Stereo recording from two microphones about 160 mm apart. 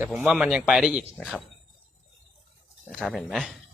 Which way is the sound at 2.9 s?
5° left (ahead or behind).